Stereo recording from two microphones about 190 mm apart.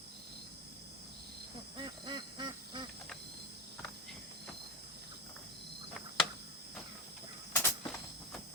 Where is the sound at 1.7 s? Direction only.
25° right (ahead or behind).